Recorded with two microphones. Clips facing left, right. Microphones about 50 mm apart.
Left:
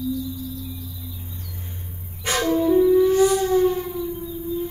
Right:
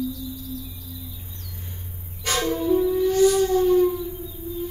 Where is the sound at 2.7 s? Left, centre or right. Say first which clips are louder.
Left 5 dB; centre.